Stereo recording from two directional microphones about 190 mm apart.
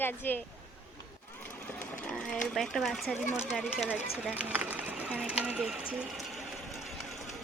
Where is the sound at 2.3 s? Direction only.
Centre (ahead or behind).